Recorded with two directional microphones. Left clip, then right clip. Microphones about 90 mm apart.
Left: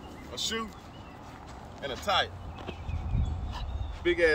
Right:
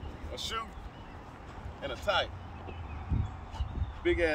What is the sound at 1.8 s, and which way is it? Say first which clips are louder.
Speech: left 2 dB; 20° right (ahead or behind).